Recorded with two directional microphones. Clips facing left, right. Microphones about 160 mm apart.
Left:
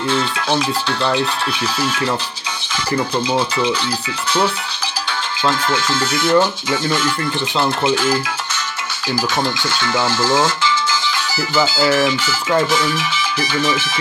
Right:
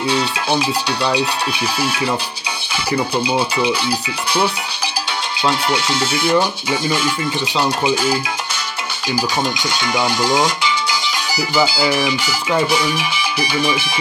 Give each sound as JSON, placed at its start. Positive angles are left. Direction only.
{"t": 0.1, "sound": "speech", "side_deg": -15}
{"t": 5.5, "sound": "speech", "side_deg": -15}